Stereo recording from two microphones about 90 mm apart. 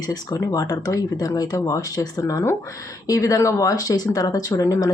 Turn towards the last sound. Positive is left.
turn(degrees=40)  # may be behind; listen again after turning